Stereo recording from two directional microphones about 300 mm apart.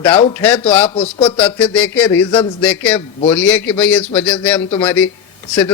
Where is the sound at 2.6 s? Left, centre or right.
Centre.